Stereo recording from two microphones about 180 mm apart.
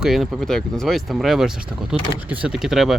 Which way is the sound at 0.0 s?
Centre (ahead or behind).